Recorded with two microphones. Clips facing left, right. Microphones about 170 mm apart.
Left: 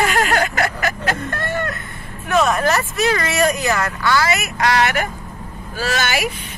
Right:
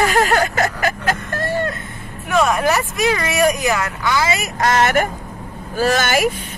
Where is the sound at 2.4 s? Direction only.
10° right (ahead or behind).